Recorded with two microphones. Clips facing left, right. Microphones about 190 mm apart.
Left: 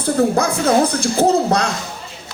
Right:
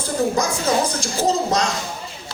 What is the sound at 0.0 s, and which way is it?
Speech, 60° left (ahead or behind).